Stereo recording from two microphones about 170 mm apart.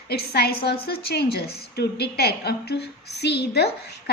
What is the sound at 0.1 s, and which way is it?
A woman's voice, 70° left (ahead or behind).